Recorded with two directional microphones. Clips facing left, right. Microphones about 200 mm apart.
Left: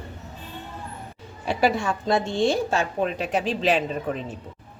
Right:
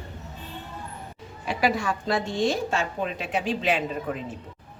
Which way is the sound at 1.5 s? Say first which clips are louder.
Left 2 dB; 30° left (ahead or behind).